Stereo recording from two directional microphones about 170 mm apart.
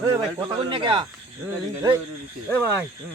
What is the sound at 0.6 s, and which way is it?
Speech, 30° right (ahead or behind).